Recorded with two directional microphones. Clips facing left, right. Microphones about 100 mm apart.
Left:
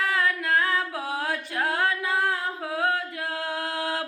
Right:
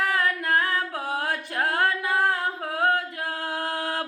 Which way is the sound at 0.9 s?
50° right (ahead or behind).